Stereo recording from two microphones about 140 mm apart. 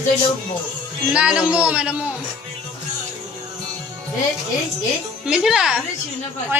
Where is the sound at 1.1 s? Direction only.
5° right (ahead or behind).